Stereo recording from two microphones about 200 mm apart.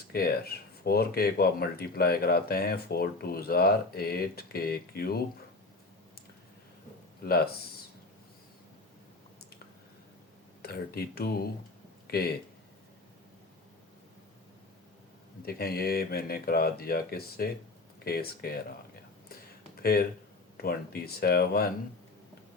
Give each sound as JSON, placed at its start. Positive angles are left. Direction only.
{"t": 0.1, "sound": "speech", "side_deg": 50}
{"t": 7.2, "sound": "speech", "side_deg": 50}
{"t": 10.6, "sound": "speech", "side_deg": 50}
{"t": 15.4, "sound": "speech", "side_deg": 50}
{"t": 19.3, "sound": "a sound", "side_deg": 50}
{"t": 20.6, "sound": "speech", "side_deg": 50}